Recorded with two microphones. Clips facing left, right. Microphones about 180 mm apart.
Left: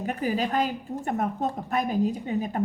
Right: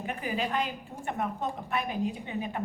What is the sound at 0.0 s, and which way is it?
A woman's voice, 40° left (ahead or behind).